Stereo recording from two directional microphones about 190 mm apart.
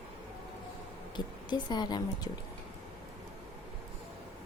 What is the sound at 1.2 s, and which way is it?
A woman's voice, 20° left (ahead or behind).